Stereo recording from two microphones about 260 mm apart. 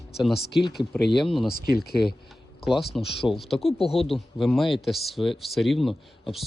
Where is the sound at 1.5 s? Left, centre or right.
Left.